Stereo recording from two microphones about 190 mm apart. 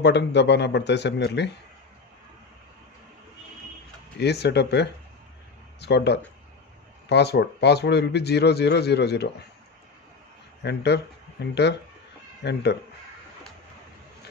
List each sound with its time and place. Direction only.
0.0 s speech: 65° left (ahead or behind)
4.2 s speech: 60° left (ahead or behind)
10.6 s speech: 60° left (ahead or behind)